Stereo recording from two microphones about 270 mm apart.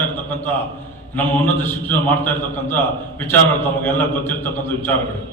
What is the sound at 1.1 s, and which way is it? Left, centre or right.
A man's voice, centre.